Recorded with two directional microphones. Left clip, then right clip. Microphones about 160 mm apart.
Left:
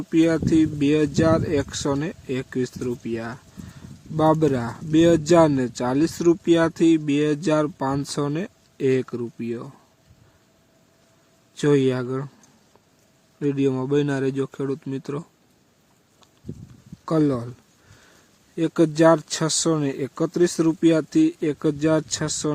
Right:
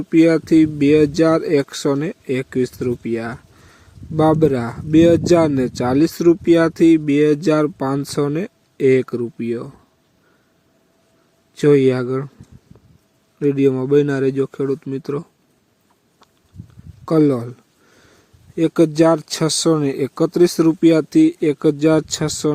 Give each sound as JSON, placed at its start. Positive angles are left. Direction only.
{"t": 0.1, "sound": "speech", "side_deg": -20}
{"t": 11.5, "sound": "speech", "side_deg": -20}
{"t": 13.4, "sound": "speech", "side_deg": -20}
{"t": 17.1, "sound": "speech", "side_deg": -20}
{"t": 18.5, "sound": "speech", "side_deg": -20}